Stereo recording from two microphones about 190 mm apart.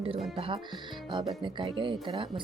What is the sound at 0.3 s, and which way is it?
Speech, 25° right (ahead or behind).